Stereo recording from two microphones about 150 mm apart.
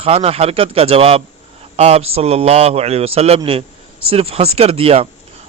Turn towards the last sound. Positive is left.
turn(degrees=-40)  # may be behind; listen again after turning